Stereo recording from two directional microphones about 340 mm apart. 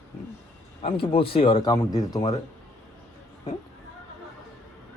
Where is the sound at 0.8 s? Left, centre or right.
Centre.